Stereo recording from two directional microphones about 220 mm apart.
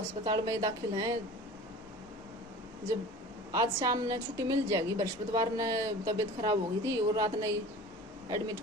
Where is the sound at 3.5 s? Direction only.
15° right (ahead or behind).